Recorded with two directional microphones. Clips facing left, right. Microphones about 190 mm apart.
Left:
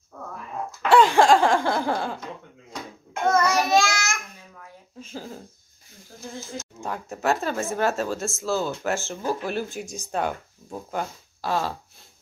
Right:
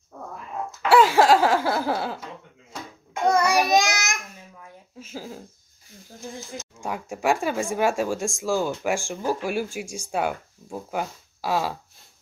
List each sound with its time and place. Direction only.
0.8 s a sound: 5° right (ahead or behind)
3.3 s child singing: 15° right (ahead or behind)
4.9 s speech: 5° right (ahead or behind)
6.8 s speech: 10° right (ahead or behind)